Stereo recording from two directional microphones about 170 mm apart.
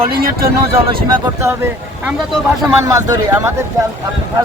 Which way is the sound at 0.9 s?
20° right (ahead or behind).